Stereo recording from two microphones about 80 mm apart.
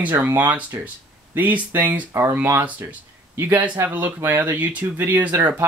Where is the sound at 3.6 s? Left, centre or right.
Right.